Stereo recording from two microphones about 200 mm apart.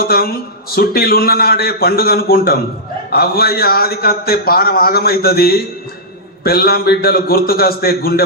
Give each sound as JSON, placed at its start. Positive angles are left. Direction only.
{"t": 0.0, "sound": "a man's voice", "side_deg": 50}